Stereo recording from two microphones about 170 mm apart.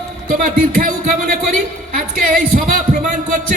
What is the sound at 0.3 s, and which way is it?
A man's voice, 55° right (ahead or behind).